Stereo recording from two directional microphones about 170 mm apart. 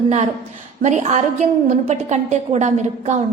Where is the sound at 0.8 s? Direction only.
45° right (ahead or behind).